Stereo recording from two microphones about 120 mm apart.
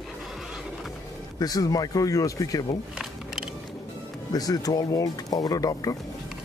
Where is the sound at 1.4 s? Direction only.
30° left (ahead or behind).